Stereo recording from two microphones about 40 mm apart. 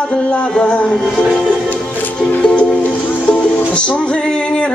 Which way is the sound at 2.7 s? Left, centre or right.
Left.